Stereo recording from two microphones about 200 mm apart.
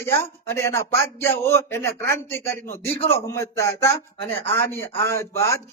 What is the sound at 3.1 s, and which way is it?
A man's voice, 15° left (ahead or behind).